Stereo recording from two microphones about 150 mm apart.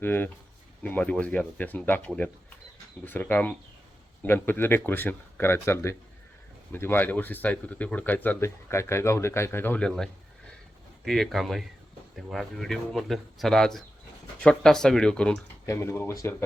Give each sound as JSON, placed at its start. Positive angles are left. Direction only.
{"t": 0.0, "sound": "speech", "side_deg": 15}
{"t": 15.6, "sound": "speech", "side_deg": 20}